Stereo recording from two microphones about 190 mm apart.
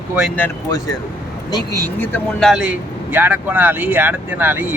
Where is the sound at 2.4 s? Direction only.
Centre (ahead or behind).